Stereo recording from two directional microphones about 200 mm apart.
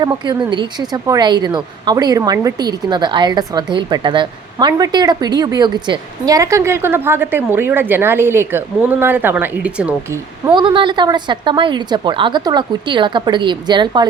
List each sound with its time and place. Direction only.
0.0 s a woman's voice: 20° right (ahead or behind)
10.5 s a woman's voice: 25° right (ahead or behind)